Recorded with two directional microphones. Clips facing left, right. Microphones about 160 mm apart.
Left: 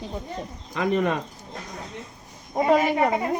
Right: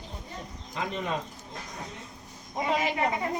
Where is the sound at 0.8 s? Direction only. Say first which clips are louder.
Left 9 dB; 60° left (ahead or behind).